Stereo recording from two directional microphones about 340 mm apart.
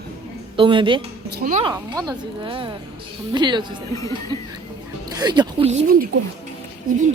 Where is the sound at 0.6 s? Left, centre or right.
Centre.